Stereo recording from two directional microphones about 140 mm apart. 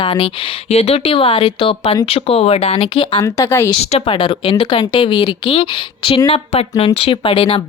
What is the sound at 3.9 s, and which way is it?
Speech, 40° left (ahead or behind).